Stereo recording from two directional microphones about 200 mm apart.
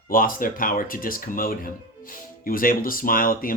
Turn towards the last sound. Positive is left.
turn(degrees=45)  # may be behind; listen again after turning